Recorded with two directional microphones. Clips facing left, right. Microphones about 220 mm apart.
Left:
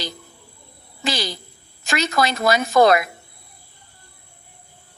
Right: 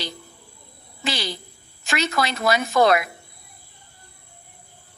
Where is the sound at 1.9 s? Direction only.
40° left (ahead or behind).